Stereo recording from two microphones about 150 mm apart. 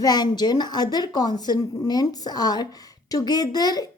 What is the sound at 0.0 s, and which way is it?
A woman's voice, 30° left (ahead or behind).